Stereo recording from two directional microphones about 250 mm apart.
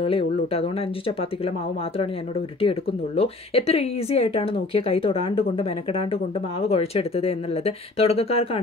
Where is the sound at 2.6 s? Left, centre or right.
Left.